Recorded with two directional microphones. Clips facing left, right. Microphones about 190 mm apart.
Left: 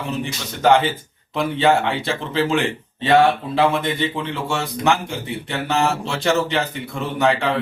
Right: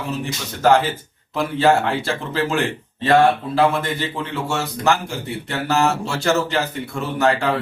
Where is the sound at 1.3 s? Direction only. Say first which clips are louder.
Right 1 dB; centre (ahead or behind).